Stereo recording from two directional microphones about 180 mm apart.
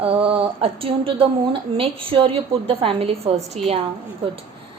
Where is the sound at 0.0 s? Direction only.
30° right (ahead or behind).